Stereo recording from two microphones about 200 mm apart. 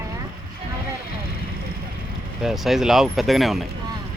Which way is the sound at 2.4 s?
Centre (ahead or behind).